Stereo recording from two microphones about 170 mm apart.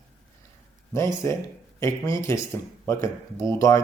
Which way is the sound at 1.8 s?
15° left (ahead or behind).